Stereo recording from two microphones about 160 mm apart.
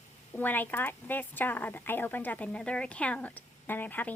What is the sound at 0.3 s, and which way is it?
A woman's voice, 10° left (ahead or behind).